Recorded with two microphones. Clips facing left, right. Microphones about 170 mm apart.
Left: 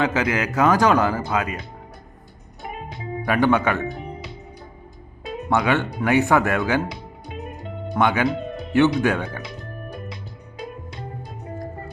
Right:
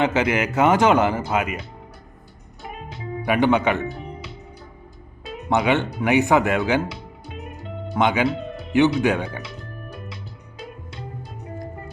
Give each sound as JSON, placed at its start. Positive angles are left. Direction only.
{"t": 0.0, "sound": "a man's voice", "side_deg": -25}
{"t": 3.2, "sound": "speech", "side_deg": -15}
{"t": 5.5, "sound": "a man's voice", "side_deg": -20}
{"t": 7.9, "sound": "a man's voice", "side_deg": -20}